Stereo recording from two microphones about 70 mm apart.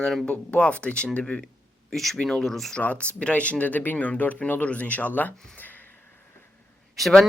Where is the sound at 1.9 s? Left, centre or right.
Centre.